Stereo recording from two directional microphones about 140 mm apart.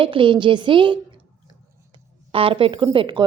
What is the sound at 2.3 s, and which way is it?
Speech, 40° right (ahead or behind).